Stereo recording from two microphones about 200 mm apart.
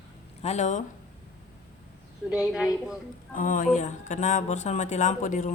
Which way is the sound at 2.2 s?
5° right (ahead or behind).